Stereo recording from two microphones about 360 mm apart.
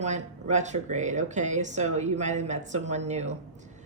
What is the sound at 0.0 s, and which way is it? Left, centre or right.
A woman's voice, centre.